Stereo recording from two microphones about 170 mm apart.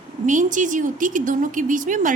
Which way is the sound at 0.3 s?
50° right (ahead or behind).